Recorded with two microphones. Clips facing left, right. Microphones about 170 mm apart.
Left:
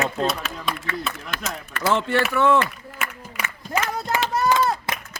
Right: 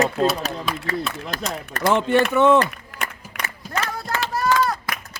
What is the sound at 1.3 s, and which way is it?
Speech, 40° right (ahead or behind).